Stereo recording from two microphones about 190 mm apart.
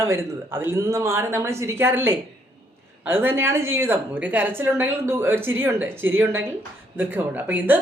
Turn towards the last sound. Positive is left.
turn(degrees=-10)  # may be behind; listen again after turning